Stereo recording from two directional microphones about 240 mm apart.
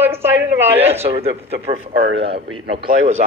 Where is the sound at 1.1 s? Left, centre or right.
Right.